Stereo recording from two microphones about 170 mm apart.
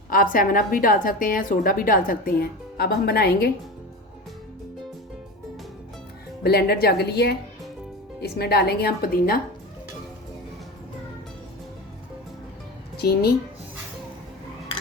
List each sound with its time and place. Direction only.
0.1 s a woman's voice: 55° left (ahead or behind)
6.4 s a woman's voice: 70° left (ahead or behind)
13.0 s speech: 70° left (ahead or behind)